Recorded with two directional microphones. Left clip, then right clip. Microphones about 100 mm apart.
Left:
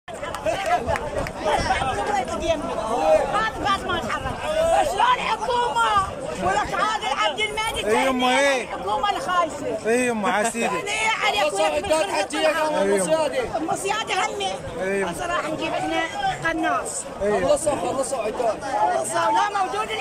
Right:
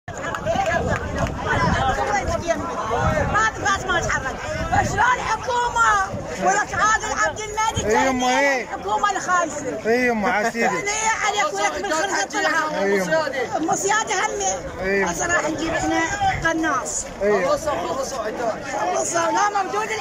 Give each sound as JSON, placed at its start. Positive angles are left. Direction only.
{"t": 3.3, "sound": "chatter", "side_deg": 5}
{"t": 8.4, "sound": "a man's voice", "side_deg": -5}
{"t": 8.9, "sound": "speech", "side_deg": 10}
{"t": 9.8, "sound": "speech", "side_deg": -5}
{"t": 12.4, "sound": "speech", "side_deg": 0}
{"t": 13.0, "sound": "speech", "side_deg": 45}
{"t": 13.7, "sound": "speech", "side_deg": 5}
{"t": 18.9, "sound": "speech", "side_deg": 0}